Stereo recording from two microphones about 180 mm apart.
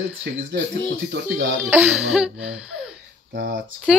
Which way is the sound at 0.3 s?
70° right (ahead or behind).